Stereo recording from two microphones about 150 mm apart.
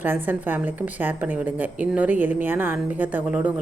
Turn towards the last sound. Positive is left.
turn(degrees=-10)  # may be behind; listen again after turning